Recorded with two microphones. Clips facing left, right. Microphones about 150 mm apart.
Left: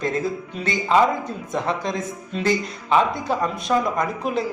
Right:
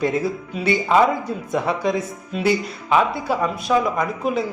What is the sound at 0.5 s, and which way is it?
Speech, 10° right (ahead or behind).